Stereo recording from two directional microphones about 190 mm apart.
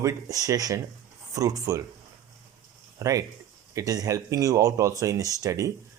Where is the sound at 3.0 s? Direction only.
15° right (ahead or behind).